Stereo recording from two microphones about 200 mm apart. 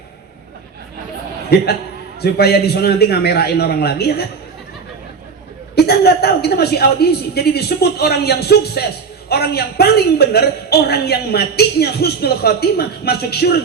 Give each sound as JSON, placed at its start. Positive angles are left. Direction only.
{"t": 2.2, "sound": "a man's voice", "side_deg": 55}
{"t": 5.7, "sound": "a man's voice", "side_deg": 55}